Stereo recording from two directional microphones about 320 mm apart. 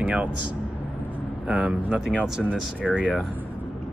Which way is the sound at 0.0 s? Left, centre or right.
Centre.